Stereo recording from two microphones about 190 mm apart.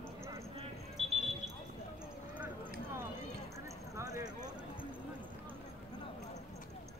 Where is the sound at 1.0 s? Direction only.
Centre (ahead or behind).